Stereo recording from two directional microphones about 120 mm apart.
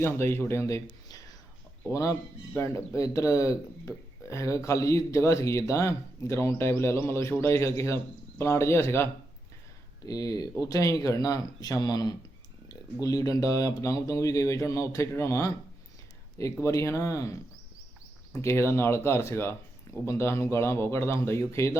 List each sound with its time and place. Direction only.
0.2 s a man's voice: 20° left (ahead or behind)
10.1 s a man's voice: 30° left (ahead or behind)
18.4 s a man's voice: 20° left (ahead or behind)